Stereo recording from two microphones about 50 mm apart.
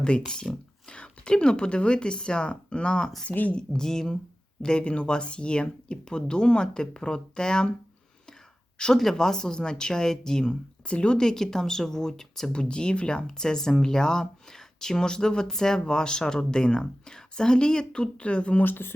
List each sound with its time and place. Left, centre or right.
0.4 s speech: centre
0.9 s speech: centre
3.2 s speech: left
3.5 s speech: centre
4.6 s speech: left
8.8 s speech: centre
12.5 s speech: centre
18.6 s speech: left